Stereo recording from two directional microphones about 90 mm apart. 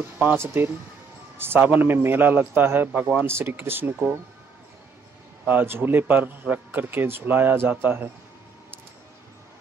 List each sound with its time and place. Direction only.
0.4 s a man's voice: 25° right (ahead or behind)
5.5 s a man's voice: 25° right (ahead or behind)